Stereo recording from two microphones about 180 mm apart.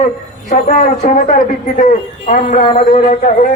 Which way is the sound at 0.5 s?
45° left (ahead or behind).